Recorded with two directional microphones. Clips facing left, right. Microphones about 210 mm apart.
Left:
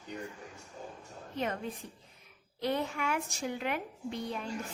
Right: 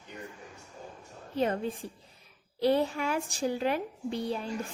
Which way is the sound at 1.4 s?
30° right (ahead or behind).